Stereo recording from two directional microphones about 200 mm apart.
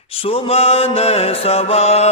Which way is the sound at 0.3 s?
30° left (ahead or behind).